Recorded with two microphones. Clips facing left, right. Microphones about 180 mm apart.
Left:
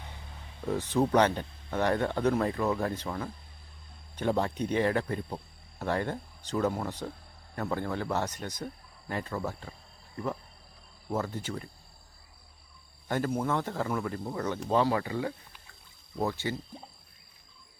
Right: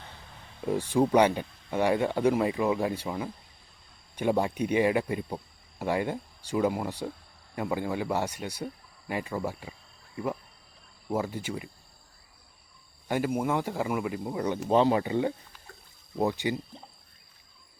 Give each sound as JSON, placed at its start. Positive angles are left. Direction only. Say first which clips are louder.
{"t": 0.6, "sound": "speech", "louder": "right 2 dB", "side_deg": -10}
{"t": 11.1, "sound": "speech", "louder": "right 2 dB", "side_deg": -10}
{"t": 13.1, "sound": "speech", "louder": "right 2 dB", "side_deg": -10}